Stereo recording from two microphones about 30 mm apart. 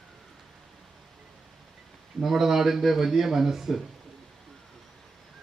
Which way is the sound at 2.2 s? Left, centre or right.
Centre.